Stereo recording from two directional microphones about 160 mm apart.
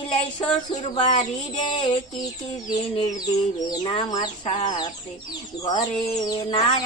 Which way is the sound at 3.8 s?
30° left (ahead or behind).